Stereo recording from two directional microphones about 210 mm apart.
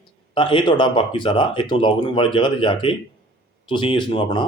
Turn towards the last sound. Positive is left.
turn(degrees=20)  # may be behind; listen again after turning